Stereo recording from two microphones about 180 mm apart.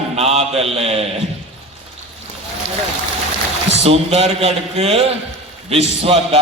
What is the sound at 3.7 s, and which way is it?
A man's voice, 35° right (ahead or behind).